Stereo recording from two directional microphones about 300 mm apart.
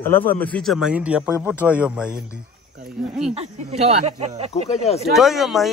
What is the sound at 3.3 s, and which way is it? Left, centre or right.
Speech, right.